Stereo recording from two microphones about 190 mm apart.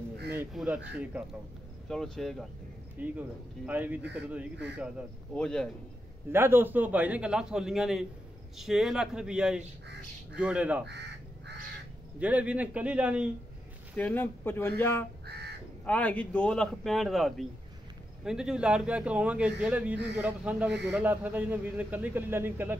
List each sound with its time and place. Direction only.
0.4 s a man's voice: 5° right (ahead or behind)
5.3 s a man's voice: 5° left (ahead or behind)
6.3 s a man's voice: 10° right (ahead or behind)
10.9 s crow: 65° right (ahead or behind)
12.2 s a man's voice: 5° right (ahead or behind)
13.9 s a man's voice: 10° left (ahead or behind); by 22.8 s 10° right (ahead or behind)